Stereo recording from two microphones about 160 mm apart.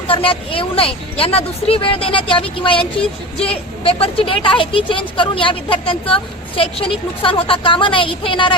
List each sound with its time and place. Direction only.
0.1 s a woman's voice: 35° left (ahead or behind)